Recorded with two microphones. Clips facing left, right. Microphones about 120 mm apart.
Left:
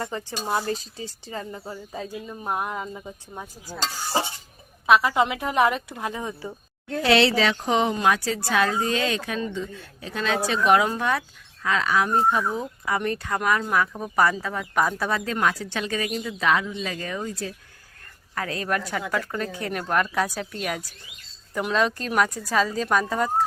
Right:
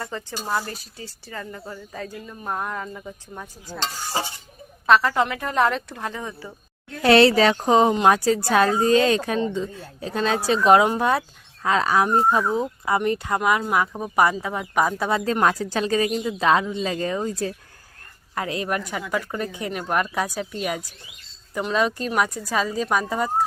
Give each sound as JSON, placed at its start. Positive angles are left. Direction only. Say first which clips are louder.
{"t": 0.0, "sound": "speech", "louder": "left 1 dB", "side_deg": 20}
{"t": 4.9, "sound": "speech", "louder": "right 1 dB", "side_deg": 10}
{"t": 7.0, "sound": "a woman's voice", "louder": "right 5 dB", "side_deg": -45}
{"t": 13.4, "sound": "speech", "louder": "right 1 dB", "side_deg": -10}
{"t": 15.2, "sound": "a woman's voice", "louder": "right 4 dB", "side_deg": -35}
{"t": 18.3, "sound": "speech", "louder": "right 1 dB", "side_deg": -20}